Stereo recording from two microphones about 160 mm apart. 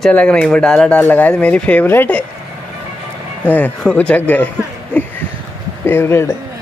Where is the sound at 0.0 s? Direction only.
5° left (ahead or behind).